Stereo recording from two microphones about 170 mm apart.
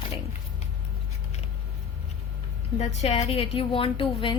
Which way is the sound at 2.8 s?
40° left (ahead or behind).